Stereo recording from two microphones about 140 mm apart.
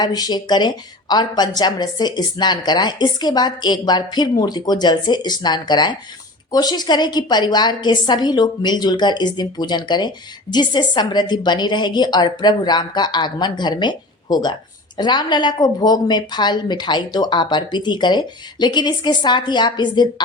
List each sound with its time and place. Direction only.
0.0 s a woman's voice: 30° left (ahead or behind)